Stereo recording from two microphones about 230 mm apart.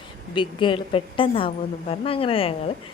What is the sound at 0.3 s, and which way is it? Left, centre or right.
Speech, left.